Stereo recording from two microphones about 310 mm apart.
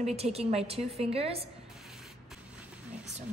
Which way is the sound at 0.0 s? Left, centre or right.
Centre.